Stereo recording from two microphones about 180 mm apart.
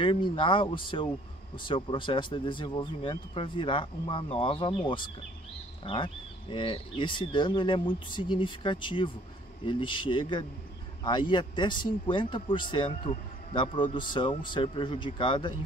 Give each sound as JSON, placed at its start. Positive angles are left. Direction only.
{"t": 0.0, "sound": "speech", "side_deg": 30}